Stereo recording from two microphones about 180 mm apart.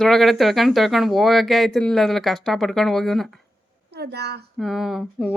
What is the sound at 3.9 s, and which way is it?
Speech, 65° right (ahead or behind).